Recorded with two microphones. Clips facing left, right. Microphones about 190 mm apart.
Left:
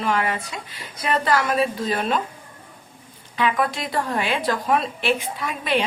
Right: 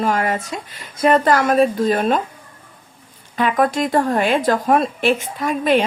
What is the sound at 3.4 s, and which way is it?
A woman's voice, 45° right (ahead or behind).